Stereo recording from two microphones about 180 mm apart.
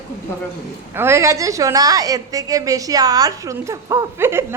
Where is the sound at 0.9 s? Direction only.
15° right (ahead or behind).